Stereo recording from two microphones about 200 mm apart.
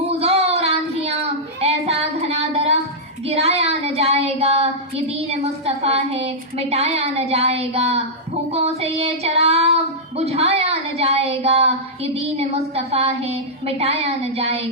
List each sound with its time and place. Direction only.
0.1 s child singing: 30° right (ahead or behind)
3.2 s a sound: 30° right (ahead or behind)
8.5 s child singing: 30° right (ahead or behind)